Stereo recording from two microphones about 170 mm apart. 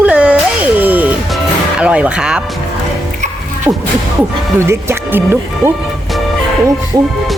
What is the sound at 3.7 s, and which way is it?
Speech, 5° right (ahead or behind).